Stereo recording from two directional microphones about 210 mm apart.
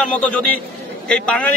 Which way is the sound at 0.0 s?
5° left (ahead or behind).